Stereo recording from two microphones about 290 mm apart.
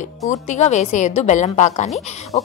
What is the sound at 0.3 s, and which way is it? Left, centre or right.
Speech, left.